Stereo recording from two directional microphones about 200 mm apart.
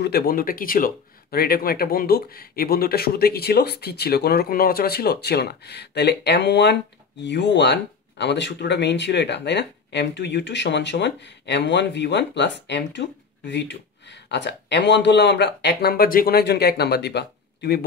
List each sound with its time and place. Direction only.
0.0 s speech: 50° left (ahead or behind)